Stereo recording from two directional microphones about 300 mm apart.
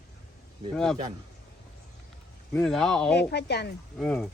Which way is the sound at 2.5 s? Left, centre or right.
Centre.